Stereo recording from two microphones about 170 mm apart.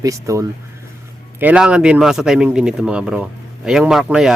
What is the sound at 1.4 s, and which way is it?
A man's voice, 5° right (ahead or behind).